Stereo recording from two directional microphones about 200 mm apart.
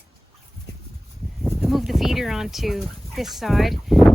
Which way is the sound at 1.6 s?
Centre (ahead or behind).